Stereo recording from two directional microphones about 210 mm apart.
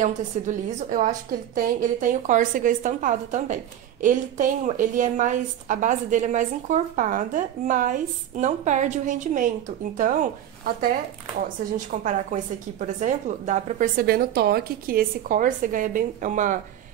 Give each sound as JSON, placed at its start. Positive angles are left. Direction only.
{"t": 0.0, "sound": "a woman's voice", "side_deg": -35}
{"t": 11.4, "sound": "a woman's voice", "side_deg": -35}